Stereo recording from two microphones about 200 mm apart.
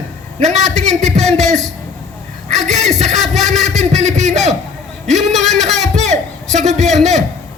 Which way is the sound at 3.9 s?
35° right (ahead or behind).